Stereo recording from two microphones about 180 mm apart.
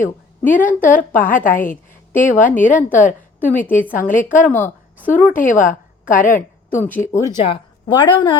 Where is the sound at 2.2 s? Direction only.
45° left (ahead or behind).